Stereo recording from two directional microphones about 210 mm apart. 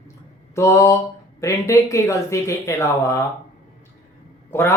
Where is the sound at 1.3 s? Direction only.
15° left (ahead or behind).